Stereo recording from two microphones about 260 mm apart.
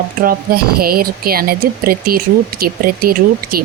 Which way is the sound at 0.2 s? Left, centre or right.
Right.